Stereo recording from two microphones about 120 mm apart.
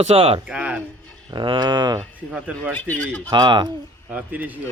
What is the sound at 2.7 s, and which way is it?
Speech, 15° left (ahead or behind).